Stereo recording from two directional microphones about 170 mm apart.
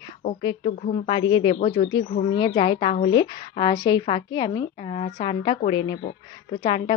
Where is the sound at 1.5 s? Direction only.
35° left (ahead or behind).